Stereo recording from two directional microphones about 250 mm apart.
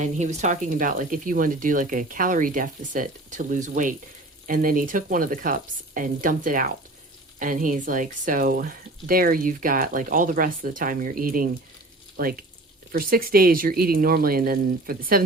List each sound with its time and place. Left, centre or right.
0.0 s speech: right